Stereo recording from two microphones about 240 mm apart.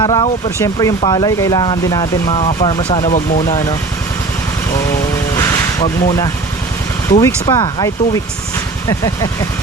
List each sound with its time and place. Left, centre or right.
0.0 s speech: centre
5.8 s speech: centre